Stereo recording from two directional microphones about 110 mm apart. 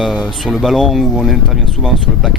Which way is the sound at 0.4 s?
Centre (ahead or behind).